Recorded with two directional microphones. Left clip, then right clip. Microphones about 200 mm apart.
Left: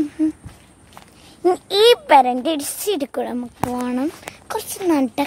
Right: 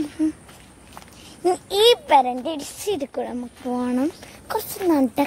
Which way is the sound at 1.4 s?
20° left (ahead or behind).